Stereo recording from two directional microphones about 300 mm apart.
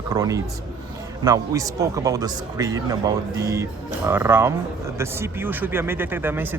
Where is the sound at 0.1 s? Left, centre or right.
Centre.